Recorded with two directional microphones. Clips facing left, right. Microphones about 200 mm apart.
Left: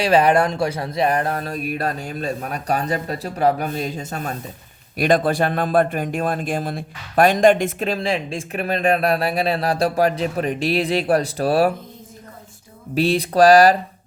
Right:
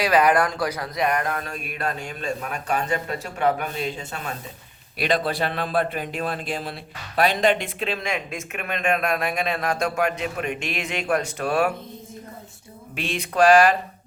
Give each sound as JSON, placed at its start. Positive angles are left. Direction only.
{"t": 0.0, "sound": "a man's voice", "side_deg": 30}
{"t": 12.9, "sound": "a man's voice", "side_deg": 35}